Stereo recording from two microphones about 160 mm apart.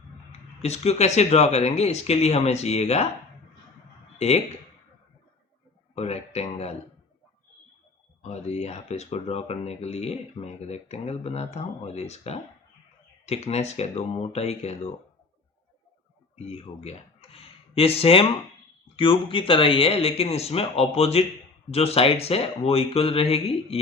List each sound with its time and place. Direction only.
0.6 s speech: 40° left (ahead or behind)
4.2 s speech: 40° left (ahead or behind)
5.9 s speech: 40° left (ahead or behind)
8.2 s speech: 40° left (ahead or behind)
16.5 s speech: 40° left (ahead or behind)